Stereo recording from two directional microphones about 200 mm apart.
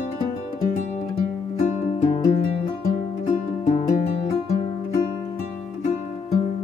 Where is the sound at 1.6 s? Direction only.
40° left (ahead or behind).